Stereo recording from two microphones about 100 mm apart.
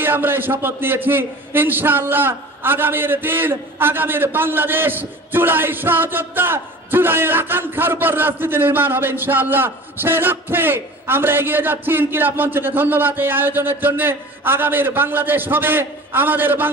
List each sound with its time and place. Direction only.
0.0 s a man's voice: 20° right (ahead or behind)